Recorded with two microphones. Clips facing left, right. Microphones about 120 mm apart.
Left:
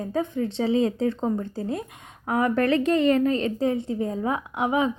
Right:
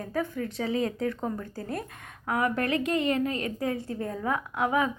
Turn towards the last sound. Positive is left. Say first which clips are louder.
# left 3 dB
turn(degrees=20)  # may be behind; listen again after turning